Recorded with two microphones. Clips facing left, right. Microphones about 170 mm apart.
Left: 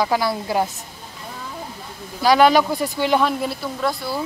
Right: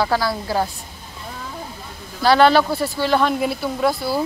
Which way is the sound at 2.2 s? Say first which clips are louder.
Even; 10° left (ahead or behind).